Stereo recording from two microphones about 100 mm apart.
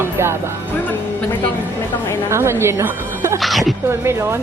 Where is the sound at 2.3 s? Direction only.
25° right (ahead or behind).